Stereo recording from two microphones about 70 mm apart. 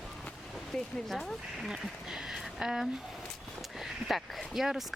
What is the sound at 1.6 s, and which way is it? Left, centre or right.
Speech, centre.